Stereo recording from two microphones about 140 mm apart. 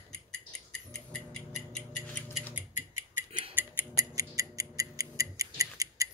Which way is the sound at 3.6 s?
15° right (ahead or behind).